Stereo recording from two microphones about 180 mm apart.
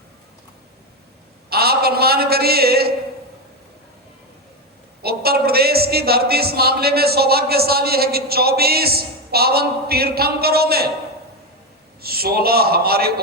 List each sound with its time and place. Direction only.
1.5 s a sound: 60° right (ahead or behind)
5.0 s speech: 60° right (ahead or behind)
12.0 s speech: 60° right (ahead or behind)